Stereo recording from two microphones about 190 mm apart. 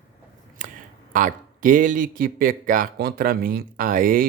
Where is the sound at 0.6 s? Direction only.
40° right (ahead or behind).